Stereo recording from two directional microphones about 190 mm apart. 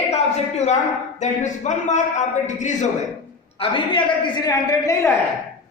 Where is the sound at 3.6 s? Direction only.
25° left (ahead or behind).